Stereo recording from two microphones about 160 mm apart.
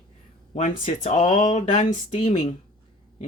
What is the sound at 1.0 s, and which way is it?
Speech, 45° left (ahead or behind).